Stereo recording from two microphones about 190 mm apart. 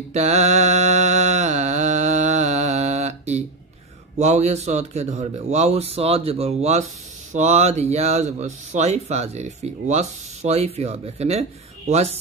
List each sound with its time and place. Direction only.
0.1 s mantra: 35° right (ahead or behind)
4.2 s speech: 35° right (ahead or behind)